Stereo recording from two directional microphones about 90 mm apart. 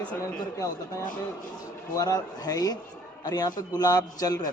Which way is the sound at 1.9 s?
45° left (ahead or behind).